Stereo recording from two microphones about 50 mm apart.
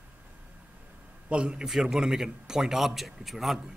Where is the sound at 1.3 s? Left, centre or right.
Right.